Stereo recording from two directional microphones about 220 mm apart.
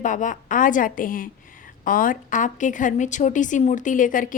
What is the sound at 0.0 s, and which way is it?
A woman's voice, 35° left (ahead or behind).